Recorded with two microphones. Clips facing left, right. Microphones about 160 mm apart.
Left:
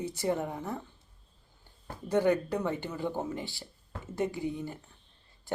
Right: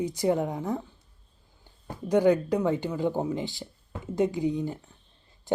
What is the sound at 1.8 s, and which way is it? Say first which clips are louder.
Speech: right 5 dB; 15° right (ahead or behind).